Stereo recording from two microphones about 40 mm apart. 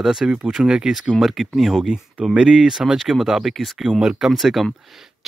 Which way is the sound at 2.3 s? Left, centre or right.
Right.